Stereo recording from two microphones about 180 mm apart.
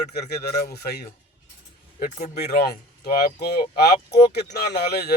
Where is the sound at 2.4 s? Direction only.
60° left (ahead or behind).